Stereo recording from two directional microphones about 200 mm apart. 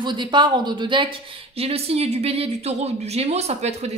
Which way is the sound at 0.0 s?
25° right (ahead or behind).